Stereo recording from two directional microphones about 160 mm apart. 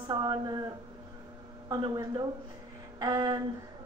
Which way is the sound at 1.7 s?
25° right (ahead or behind).